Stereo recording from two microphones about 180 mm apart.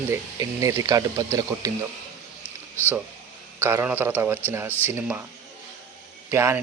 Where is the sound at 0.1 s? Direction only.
15° right (ahead or behind).